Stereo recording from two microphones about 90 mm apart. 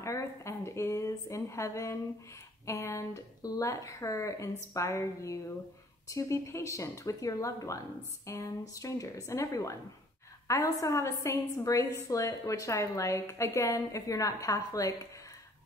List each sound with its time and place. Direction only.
0.0 s a woman's voice: 35° left (ahead or behind)